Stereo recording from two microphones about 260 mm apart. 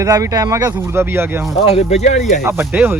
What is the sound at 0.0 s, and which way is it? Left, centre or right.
Speech, centre.